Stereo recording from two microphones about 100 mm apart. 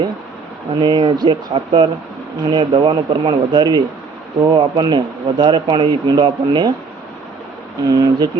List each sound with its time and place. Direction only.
0.8 s speech: 50° right (ahead or behind)
7.9 s speech: 40° right (ahead or behind)